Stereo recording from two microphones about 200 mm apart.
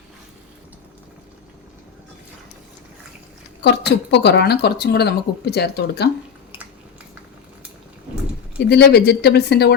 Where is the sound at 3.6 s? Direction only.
55° left (ahead or behind).